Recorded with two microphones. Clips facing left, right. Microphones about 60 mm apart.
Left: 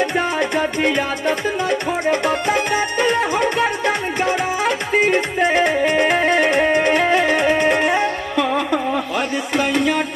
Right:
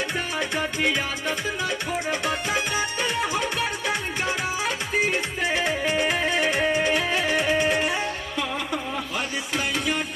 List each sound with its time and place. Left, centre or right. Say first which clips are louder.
0.0 s music: left 9 dB; left